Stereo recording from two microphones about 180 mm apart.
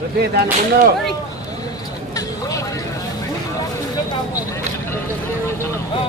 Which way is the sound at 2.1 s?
20° left (ahead or behind).